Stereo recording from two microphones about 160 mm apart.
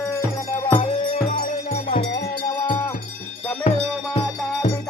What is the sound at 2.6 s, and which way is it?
Music, 25° left (ahead or behind).